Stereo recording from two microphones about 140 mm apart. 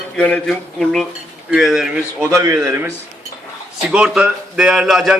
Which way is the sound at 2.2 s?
20° right (ahead or behind).